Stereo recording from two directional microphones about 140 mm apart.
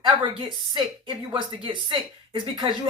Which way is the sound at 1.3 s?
35° right (ahead or behind).